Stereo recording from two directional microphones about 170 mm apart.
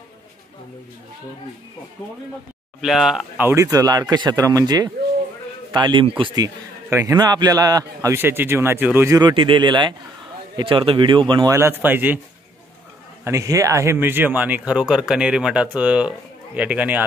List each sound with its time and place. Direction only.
2.8 s speech: 5° right (ahead or behind)
3.4 s a man's voice: 20° right (ahead or behind)
9.3 s a man's voice: 30° right (ahead or behind)
11.5 s speech: 15° right (ahead or behind)
13.2 s speech: 20° right (ahead or behind)